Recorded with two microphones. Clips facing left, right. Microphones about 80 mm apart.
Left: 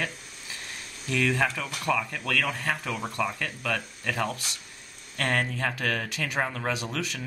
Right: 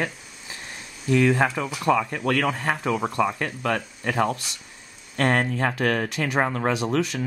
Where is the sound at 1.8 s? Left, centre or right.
Right.